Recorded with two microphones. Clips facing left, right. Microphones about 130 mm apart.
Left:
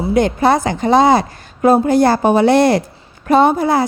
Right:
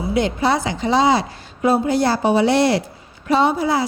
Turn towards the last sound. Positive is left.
turn(degrees=50)  # may be behind; listen again after turning